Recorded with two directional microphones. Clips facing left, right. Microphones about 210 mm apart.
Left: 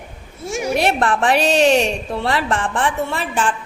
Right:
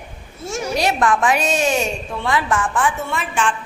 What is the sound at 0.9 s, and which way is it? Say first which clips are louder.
A woman's voice: left 1 dB; 35° left (ahead or behind).